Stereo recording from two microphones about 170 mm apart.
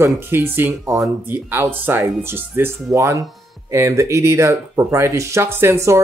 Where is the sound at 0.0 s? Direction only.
15° right (ahead or behind).